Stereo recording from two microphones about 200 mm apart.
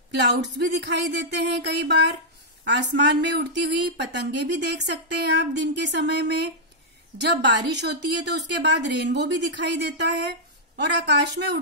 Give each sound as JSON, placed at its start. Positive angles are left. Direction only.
{"t": 0.1, "sound": "speech", "side_deg": -60}
{"t": 10.8, "sound": "speech", "side_deg": -60}